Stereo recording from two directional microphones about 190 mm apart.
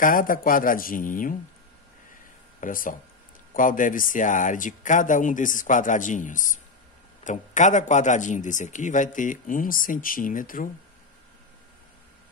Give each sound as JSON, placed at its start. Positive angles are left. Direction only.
{"t": 0.0, "sound": "speech", "side_deg": 45}
{"t": 2.6, "sound": "a man's voice", "side_deg": 45}